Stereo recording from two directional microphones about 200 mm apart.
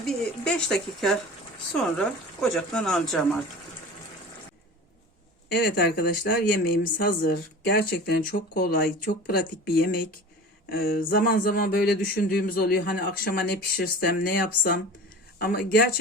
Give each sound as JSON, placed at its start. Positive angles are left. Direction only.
{"t": 0.0, "sound": "speech", "side_deg": 5}
{"t": 5.5, "sound": "speech", "side_deg": 50}